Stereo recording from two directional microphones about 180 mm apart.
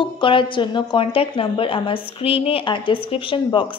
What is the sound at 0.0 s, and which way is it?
A woman's voice, 30° left (ahead or behind).